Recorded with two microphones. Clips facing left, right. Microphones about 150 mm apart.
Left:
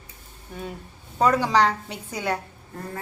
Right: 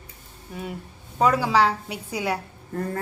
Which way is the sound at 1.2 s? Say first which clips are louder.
Even; 5° right (ahead or behind).